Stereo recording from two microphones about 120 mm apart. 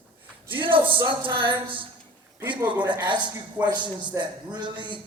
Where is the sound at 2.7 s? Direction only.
40° right (ahead or behind).